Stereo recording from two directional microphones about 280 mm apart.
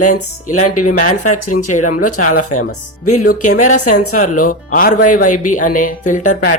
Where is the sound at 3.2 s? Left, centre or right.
Left.